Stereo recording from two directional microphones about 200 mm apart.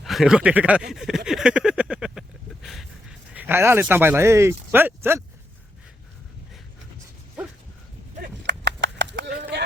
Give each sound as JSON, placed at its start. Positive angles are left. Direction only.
{"t": 0.0, "sound": "speech", "side_deg": 0}
{"t": 8.4, "sound": "a sound", "side_deg": -60}
{"t": 9.4, "sound": "run", "side_deg": -55}